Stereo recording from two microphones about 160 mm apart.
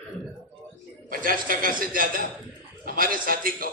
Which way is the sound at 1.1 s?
60° right (ahead or behind).